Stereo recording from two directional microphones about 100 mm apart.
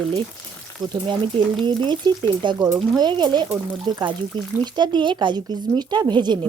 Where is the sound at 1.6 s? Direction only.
50° right (ahead or behind).